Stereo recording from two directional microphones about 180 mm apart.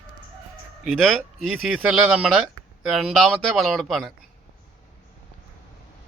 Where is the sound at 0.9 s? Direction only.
Centre (ahead or behind).